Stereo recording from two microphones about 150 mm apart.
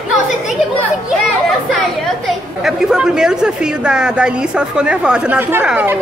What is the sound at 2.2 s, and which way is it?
A woman's voice, 5° right (ahead or behind).